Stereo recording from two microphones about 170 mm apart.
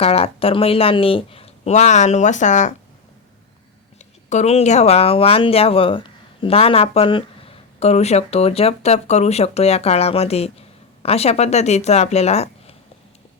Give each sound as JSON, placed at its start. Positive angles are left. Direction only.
{"t": 0.0, "sound": "speech", "side_deg": 35}
{"t": 3.9, "sound": "speech", "side_deg": 45}